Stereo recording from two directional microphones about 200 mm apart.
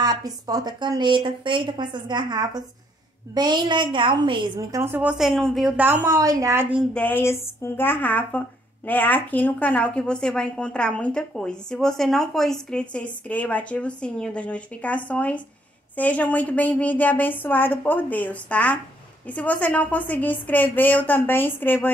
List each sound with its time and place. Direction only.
0.0 s a woman's voice: 20° right (ahead or behind)
6.9 s a woman's voice: 5° left (ahead or behind)